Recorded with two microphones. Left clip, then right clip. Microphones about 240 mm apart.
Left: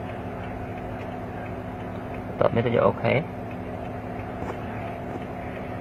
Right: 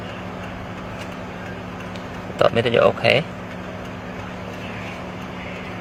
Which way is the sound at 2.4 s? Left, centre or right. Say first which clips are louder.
Right 5 dB; centre.